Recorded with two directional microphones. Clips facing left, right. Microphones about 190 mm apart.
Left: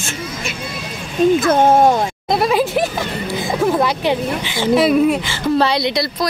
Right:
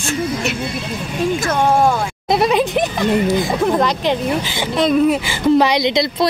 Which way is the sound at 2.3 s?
Centre (ahead or behind).